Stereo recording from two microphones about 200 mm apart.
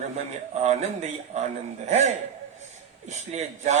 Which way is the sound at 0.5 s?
35° right (ahead or behind).